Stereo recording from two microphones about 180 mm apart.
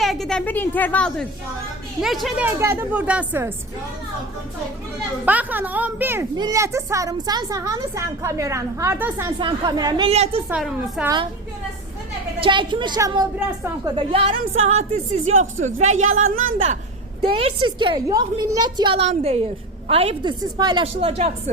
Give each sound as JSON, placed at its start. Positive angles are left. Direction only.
{"t": 0.0, "sound": "a woman's voice", "side_deg": 0}
{"t": 2.6, "sound": "a woman's voice", "side_deg": -15}
{"t": 5.2, "sound": "a woman's voice", "side_deg": -10}
{"t": 9.4, "sound": "a woman's voice", "side_deg": -20}
{"t": 10.1, "sound": "a woman's voice", "side_deg": -35}
{"t": 10.5, "sound": "a woman's voice", "side_deg": -5}
{"t": 12.4, "sound": "a woman's voice", "side_deg": -25}
{"t": 17.3, "sound": "a woman's voice", "side_deg": -30}
{"t": 20.4, "sound": "a woman's voice", "side_deg": -20}